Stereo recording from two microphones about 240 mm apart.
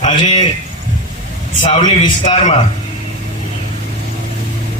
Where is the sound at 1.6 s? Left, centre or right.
Left.